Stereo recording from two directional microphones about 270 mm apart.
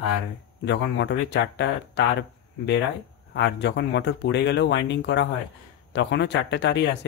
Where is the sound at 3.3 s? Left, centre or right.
Left.